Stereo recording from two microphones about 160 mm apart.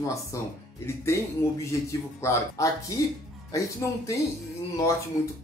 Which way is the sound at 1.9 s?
20° left (ahead or behind).